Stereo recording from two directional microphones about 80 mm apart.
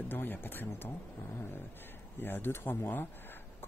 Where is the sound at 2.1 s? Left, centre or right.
Left.